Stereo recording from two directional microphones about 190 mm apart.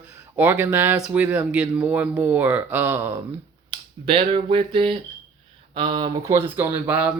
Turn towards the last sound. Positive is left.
turn(degrees=-10)  # may be behind; listen again after turning